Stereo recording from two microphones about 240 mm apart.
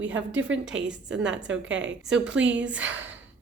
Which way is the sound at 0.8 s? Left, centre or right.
Centre.